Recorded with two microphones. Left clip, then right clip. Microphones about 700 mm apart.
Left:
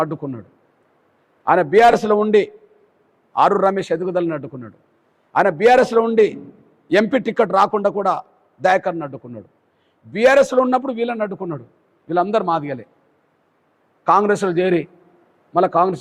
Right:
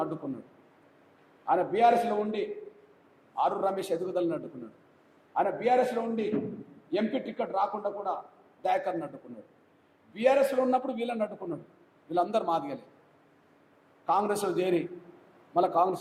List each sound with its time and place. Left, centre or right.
0.2 s a man's voice: left
1.5 s a man's voice: left
5.3 s a man's voice: left
8.6 s a man's voice: left
10.2 s a man's voice: left
14.0 s a man's voice: left